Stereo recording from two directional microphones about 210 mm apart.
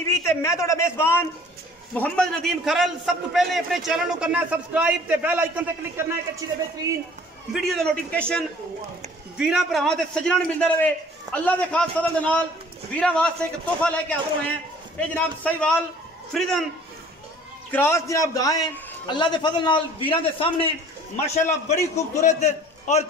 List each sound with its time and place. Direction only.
0.3 s a man's voice: 15° left (ahead or behind); by 6.6 s 15° right (ahead or behind)
7.5 s a man's voice: centre (ahead or behind)
17.6 s a man's voice: 10° left (ahead or behind); by 23.0 s 35° left (ahead or behind)